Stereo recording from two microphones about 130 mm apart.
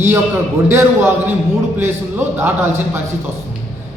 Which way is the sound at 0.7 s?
15° right (ahead or behind).